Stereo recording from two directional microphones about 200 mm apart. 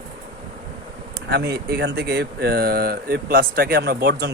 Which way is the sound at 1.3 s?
55° right (ahead or behind).